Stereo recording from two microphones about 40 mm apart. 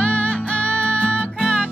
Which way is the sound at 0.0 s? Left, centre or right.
Left.